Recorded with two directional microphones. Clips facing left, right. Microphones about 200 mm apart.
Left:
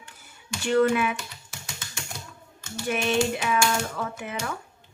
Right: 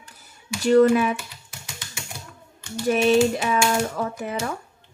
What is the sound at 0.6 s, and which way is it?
Speech, 40° right (ahead or behind).